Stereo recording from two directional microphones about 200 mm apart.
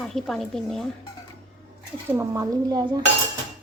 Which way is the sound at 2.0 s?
15° right (ahead or behind).